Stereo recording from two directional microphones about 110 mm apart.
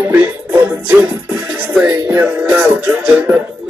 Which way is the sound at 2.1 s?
20° right (ahead or behind).